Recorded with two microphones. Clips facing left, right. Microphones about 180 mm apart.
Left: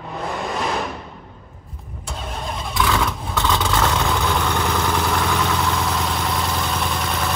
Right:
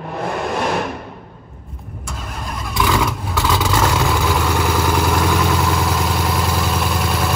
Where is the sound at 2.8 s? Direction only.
15° right (ahead or behind).